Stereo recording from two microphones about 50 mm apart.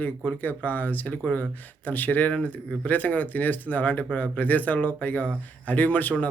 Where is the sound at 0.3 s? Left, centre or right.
Left.